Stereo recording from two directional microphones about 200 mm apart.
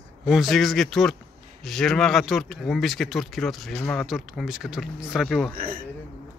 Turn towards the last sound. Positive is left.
turn(degrees=-45)  # may be behind; listen again after turning